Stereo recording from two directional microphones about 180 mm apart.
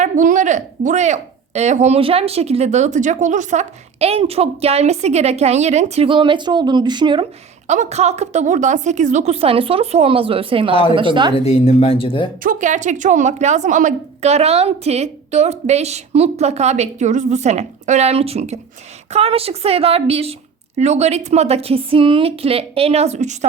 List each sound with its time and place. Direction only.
0.0 s speech: 45° right (ahead or behind); by 7.3 s 25° right (ahead or behind)
7.7 s a woman's voice: 40° right (ahead or behind)
11.3 s speech: 35° left (ahead or behind)
12.4 s speech: 45° right (ahead or behind)